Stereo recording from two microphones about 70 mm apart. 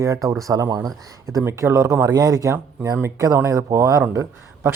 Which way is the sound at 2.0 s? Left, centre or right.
Right.